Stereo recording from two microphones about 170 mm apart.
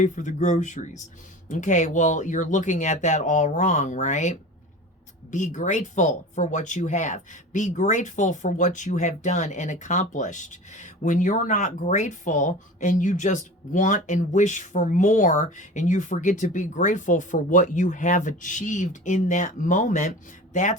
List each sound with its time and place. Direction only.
0.0 s speech: 45° left (ahead or behind)